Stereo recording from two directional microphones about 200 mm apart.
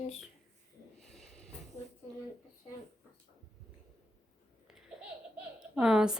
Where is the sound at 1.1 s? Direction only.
Centre (ahead or behind).